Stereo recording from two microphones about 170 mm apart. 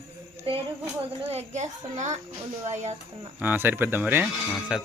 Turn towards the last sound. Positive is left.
turn(degrees=-5)  # may be behind; listen again after turning